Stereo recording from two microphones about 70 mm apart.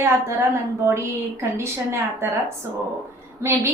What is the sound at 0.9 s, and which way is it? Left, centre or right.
A woman's voice, right.